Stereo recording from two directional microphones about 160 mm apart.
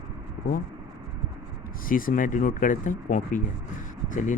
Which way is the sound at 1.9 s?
60° left (ahead or behind).